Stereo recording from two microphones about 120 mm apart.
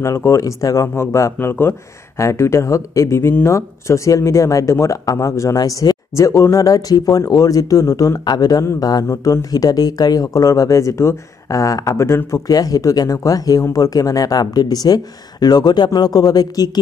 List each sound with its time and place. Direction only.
0.0 s speech: 25° left (ahead or behind)